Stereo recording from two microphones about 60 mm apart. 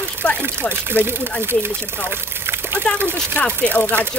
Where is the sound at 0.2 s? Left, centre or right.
Left.